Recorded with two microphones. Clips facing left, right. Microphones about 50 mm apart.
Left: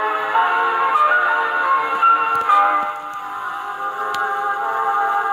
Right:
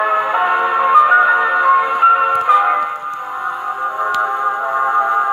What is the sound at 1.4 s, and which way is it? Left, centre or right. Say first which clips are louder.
Music: right 5 dB; right.